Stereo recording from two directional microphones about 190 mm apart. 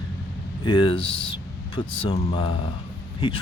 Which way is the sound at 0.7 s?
25° left (ahead or behind).